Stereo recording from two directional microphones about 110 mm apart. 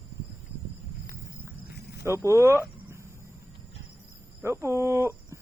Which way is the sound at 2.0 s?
25° right (ahead or behind).